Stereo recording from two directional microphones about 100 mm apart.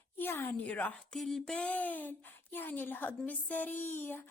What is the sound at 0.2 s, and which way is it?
A woman's voice, 20° left (ahead or behind).